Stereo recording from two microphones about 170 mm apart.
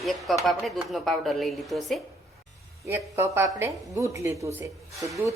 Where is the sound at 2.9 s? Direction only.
15° right (ahead or behind).